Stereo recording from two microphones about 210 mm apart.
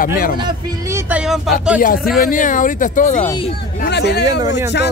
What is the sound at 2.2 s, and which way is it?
Speech, 40° left (ahead or behind).